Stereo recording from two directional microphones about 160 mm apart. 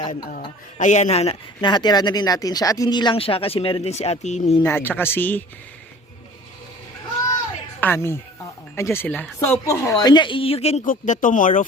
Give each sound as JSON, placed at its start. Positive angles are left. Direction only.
{"t": 0.1, "sound": "speech", "side_deg": 55}
{"t": 4.6, "sound": "a man's voice", "side_deg": 15}
{"t": 7.8, "sound": "a man's voice", "side_deg": 15}
{"t": 9.6, "sound": "speech", "side_deg": 20}
{"t": 10.8, "sound": "speech", "side_deg": 55}